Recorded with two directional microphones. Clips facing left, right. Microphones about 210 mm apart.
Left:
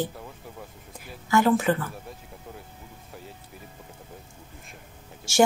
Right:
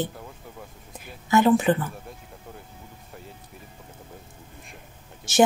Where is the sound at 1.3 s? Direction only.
20° right (ahead or behind).